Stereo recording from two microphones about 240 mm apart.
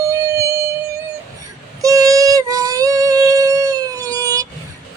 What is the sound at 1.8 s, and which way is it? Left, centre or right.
Female singing, centre.